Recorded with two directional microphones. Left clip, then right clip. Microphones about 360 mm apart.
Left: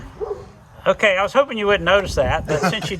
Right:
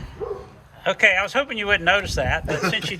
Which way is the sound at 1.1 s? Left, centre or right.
Centre.